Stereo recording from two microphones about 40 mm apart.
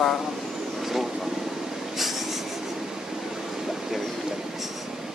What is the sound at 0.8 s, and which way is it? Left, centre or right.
Vehicle, centre.